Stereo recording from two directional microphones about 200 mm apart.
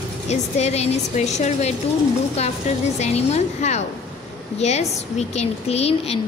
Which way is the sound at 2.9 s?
35° left (ahead or behind).